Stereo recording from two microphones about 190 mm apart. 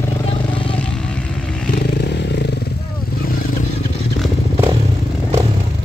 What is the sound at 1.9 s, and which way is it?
Motorcycle, 60° left (ahead or behind).